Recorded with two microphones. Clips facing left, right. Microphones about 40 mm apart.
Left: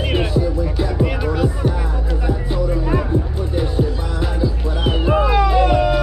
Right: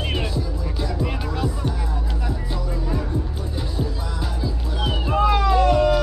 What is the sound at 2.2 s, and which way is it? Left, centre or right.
Music, left.